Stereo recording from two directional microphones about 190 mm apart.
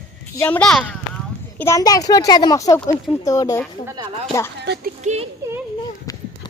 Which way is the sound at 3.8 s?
20° right (ahead or behind).